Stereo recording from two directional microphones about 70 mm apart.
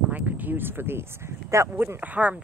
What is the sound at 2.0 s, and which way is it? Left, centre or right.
Speech, right.